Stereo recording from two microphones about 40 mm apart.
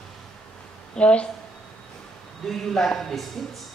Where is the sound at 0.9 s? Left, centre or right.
Left.